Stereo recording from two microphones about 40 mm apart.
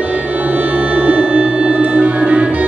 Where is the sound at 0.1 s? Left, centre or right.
Right.